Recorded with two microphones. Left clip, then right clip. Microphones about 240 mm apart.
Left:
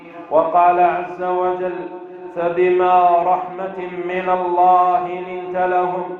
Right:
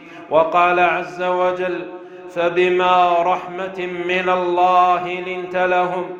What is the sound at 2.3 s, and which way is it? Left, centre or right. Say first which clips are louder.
Speech: even; right.